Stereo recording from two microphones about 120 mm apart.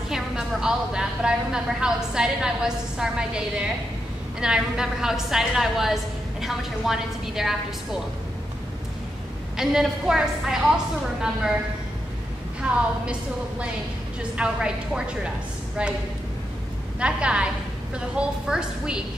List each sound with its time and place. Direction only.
0.1 s a woman's voice: 5° right (ahead or behind)
9.6 s a woman's voice: 5° right (ahead or behind)
12.6 s a woman's voice: 5° right (ahead or behind)
14.3 s a woman's voice: 10° right (ahead or behind)
17.0 s a woman's voice: 10° right (ahead or behind)